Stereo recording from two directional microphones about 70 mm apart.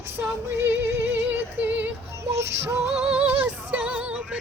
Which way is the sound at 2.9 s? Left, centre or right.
Centre.